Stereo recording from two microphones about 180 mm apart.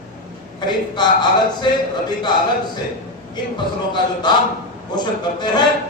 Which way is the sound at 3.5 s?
25° left (ahead or behind).